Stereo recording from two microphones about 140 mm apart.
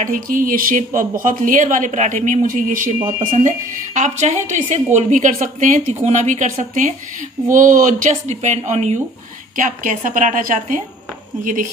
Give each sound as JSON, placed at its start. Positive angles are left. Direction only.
{"t": 0.0, "sound": "speech", "side_deg": -75}
{"t": 2.2, "sound": "speech", "side_deg": -70}
{"t": 3.0, "sound": "speech", "side_deg": -35}
{"t": 3.4, "sound": "a woman's voice", "side_deg": -60}